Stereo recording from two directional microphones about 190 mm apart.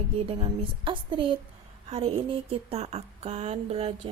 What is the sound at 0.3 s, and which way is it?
Speech, 25° right (ahead or behind).